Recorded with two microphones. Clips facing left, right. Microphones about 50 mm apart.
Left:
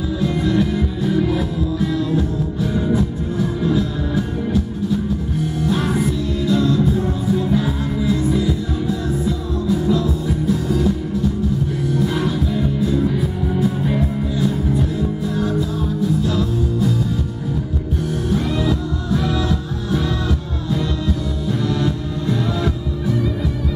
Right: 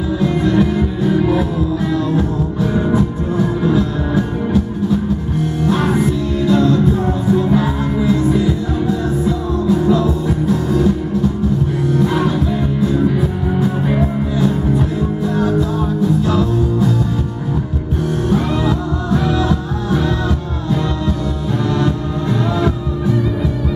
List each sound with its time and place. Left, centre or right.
0.2 s music: centre
2.9 s music: centre
5.7 s music: centre
11.9 s music: centre
18.3 s music: centre